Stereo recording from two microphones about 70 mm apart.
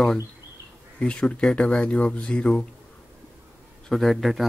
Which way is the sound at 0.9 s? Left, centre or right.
Centre.